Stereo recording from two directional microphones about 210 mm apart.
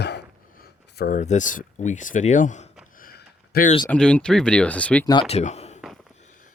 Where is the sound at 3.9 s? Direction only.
5° left (ahead or behind).